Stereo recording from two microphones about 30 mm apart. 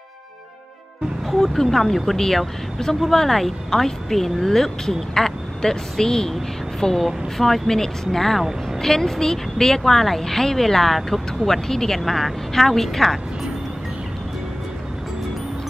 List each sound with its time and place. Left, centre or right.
1.2 s a woman's voice: centre
12.0 s a woman's voice: centre